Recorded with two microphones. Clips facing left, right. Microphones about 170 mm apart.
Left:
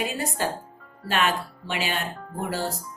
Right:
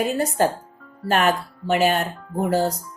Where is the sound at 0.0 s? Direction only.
45° right (ahead or behind).